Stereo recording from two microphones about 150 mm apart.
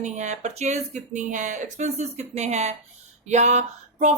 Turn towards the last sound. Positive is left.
turn(degrees=-50)  # may be behind; listen again after turning